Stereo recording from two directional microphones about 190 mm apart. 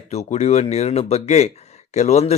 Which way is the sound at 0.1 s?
35° left (ahead or behind).